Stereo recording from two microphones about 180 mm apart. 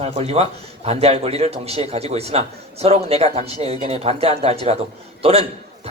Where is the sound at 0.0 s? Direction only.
35° right (ahead or behind).